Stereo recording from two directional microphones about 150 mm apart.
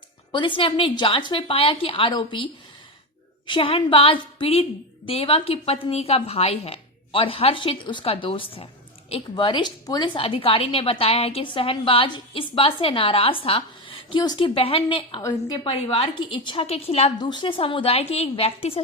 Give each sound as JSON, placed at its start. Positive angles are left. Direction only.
{"t": 0.3, "sound": "a woman's voice", "side_deg": 30}
{"t": 10.2, "sound": "a woman's voice", "side_deg": 40}
{"t": 17.2, "sound": "a woman's voice", "side_deg": 30}